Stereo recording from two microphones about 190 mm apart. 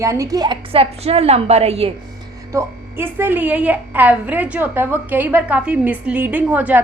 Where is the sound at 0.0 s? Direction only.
15° right (ahead or behind); by 1.9 s 35° right (ahead or behind).